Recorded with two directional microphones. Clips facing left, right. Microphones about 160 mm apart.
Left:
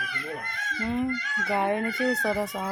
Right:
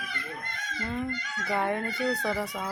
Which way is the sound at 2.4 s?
Centre (ahead or behind).